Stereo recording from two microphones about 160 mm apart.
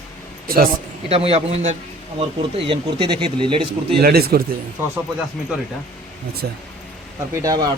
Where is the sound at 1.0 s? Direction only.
40° right (ahead or behind).